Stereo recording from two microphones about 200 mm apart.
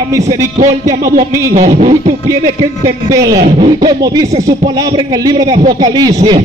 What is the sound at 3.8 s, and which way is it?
Speech, 20° right (ahead or behind).